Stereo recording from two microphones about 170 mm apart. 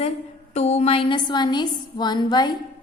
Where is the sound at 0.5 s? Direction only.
40° left (ahead or behind).